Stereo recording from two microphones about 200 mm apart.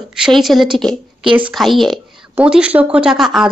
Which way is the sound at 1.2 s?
25° right (ahead or behind).